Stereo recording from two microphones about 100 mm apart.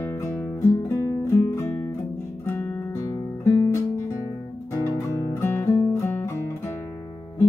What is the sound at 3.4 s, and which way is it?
Guitar, 30° left (ahead or behind).